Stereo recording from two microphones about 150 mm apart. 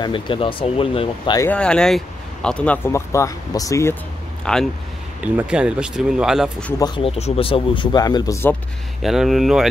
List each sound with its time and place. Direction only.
0.0 s speech: 35° left (ahead or behind)
1.5 s speech: 5° left (ahead or behind)
4.5 s speech: 5° left (ahead or behind)
5.2 s speech: 10° right (ahead or behind)
6.8 s speech: 35° left (ahead or behind); by 8.5 s 20° left (ahead or behind)
9.0 s speech: centre (ahead or behind)